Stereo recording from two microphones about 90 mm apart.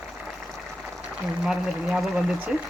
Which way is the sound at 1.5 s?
5° right (ahead or behind).